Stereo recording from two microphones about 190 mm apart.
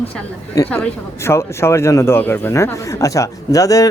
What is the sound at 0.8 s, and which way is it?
Speech, 15° left (ahead or behind).